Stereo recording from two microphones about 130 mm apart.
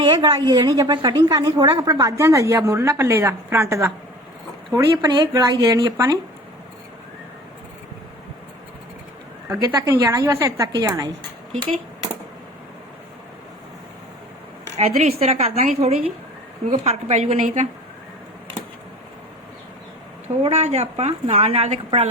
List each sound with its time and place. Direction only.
0.0 s a woman's voice: 35° right (ahead or behind)
4.8 s speech: 35° right (ahead or behind)
9.6 s a woman's voice: 30° right (ahead or behind)
14.8 s a woman's voice: 55° right (ahead or behind)
20.4 s a woman's voice: 55° right (ahead or behind)